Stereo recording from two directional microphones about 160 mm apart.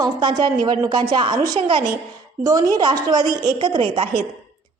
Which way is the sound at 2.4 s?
20° right (ahead or behind).